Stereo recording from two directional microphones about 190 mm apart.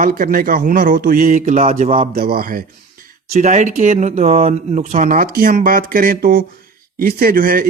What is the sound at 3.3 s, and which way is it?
Speech, 40° right (ahead or behind).